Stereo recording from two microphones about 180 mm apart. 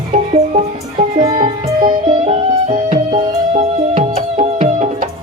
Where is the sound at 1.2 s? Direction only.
30° right (ahead or behind).